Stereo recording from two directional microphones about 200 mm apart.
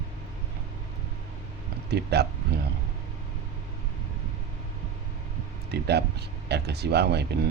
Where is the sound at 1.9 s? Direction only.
55° right (ahead or behind).